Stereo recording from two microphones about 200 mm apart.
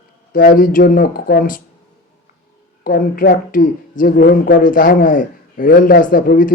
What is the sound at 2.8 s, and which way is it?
Speech, 45° left (ahead or behind).